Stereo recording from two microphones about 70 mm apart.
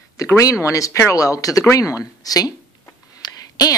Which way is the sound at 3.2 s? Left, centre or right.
Left.